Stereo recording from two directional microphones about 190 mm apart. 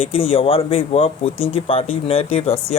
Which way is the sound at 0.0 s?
30° left (ahead or behind).